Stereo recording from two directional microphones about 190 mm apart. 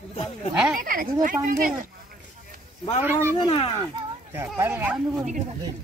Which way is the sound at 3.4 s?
25° left (ahead or behind).